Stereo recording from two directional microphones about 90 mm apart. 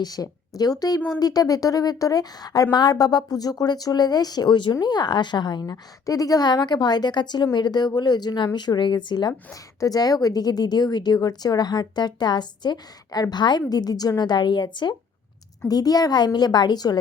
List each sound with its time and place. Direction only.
0.0 s a woman's voice: 45° left (ahead or behind)
9.5 s a woman's voice: 40° left (ahead or behind); by 14.9 s 60° left (ahead or behind)
15.7 s a woman's voice: 45° left (ahead or behind)